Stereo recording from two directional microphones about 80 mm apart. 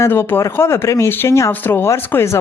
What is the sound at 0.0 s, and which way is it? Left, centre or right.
Speech, left.